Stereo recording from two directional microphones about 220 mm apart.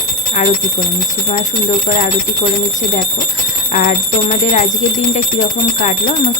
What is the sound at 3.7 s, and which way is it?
A woman's voice, 35° left (ahead or behind).